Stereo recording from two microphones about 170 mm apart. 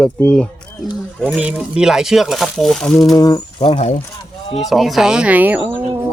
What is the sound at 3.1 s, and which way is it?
Speech, 25° left (ahead or behind).